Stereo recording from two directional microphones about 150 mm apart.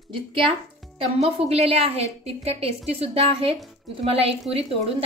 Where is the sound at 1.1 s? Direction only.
40° right (ahead or behind).